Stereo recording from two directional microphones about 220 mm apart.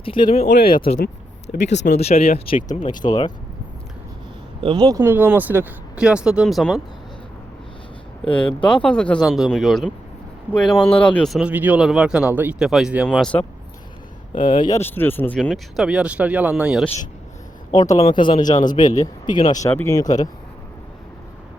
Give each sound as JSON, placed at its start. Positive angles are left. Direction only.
{"t": 0.0, "sound": "speech", "side_deg": 20}
{"t": 0.4, "sound": "speech", "side_deg": 50}
{"t": 0.7, "sound": "speech", "side_deg": 25}
{"t": 1.6, "sound": "speech", "side_deg": 50}
{"t": 2.0, "sound": "speech", "side_deg": 30}
{"t": 4.6, "sound": "speech", "side_deg": -20}
{"t": 8.2, "sound": "speech", "side_deg": 5}
{"t": 14.3, "sound": "speech", "side_deg": 20}
{"t": 14.8, "sound": "speech", "side_deg": 10}
{"t": 17.8, "sound": "speech", "side_deg": 25}
{"t": 18.5, "sound": "speech", "side_deg": 35}
{"t": 18.8, "sound": "speech", "side_deg": 20}